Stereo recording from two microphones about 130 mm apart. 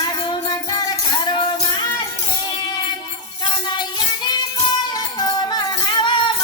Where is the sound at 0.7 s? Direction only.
30° left (ahead or behind).